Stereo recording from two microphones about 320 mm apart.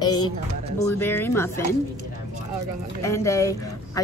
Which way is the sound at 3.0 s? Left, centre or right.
Centre.